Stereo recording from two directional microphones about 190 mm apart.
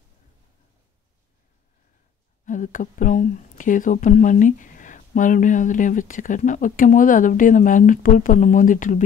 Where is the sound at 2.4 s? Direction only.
45° left (ahead or behind).